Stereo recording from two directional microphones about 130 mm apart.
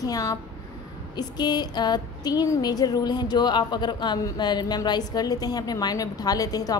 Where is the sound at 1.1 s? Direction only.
35° left (ahead or behind).